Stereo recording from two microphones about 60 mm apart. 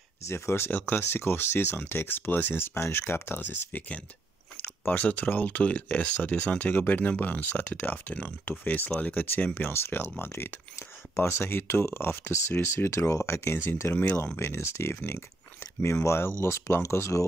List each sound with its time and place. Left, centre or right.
0.3 s speech: left
0.7 s speech: left
1.0 s speech: left
4.8 s speech: left
13.9 s speech: left